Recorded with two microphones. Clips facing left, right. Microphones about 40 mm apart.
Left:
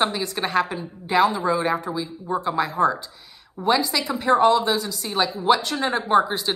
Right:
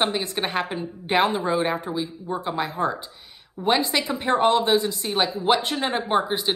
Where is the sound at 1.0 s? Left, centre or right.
Right.